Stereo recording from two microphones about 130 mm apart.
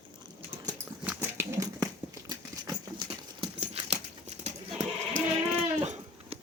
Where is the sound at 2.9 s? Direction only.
45° right (ahead or behind).